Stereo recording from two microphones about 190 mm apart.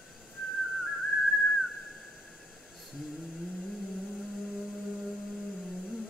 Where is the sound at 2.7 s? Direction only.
Centre (ahead or behind).